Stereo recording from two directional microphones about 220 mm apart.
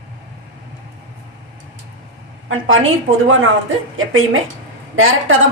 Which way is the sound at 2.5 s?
65° right (ahead or behind).